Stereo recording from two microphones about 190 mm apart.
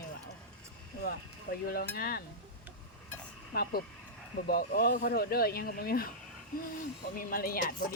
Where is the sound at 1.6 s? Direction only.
55° left (ahead or behind).